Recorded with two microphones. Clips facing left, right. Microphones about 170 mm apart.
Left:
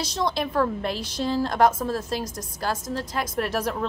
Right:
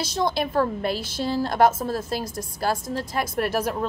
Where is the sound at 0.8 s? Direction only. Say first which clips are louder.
Right 1 dB; 5° right (ahead or behind).